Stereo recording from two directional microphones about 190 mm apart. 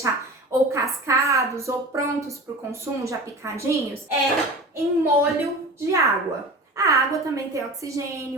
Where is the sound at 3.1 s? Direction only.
15° right (ahead or behind).